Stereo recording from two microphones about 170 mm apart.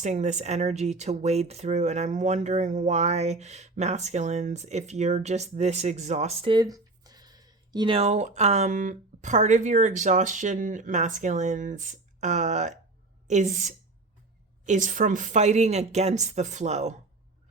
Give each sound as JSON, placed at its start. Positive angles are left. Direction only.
{"t": 0.0, "sound": "speech", "side_deg": -45}